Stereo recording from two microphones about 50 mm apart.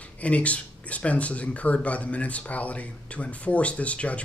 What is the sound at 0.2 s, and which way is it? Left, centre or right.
Speech, left.